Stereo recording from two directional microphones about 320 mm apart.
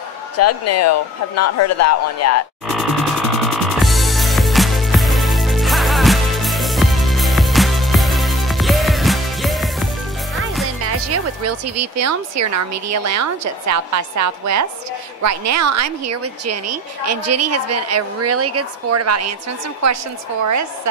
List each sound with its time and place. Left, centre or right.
0.4 s speech: left
2.7 s music: centre
10.8 s a woman's voice: right
20.4 s speech: right